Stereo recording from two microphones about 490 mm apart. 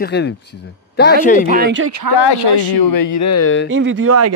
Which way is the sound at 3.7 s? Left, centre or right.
Right.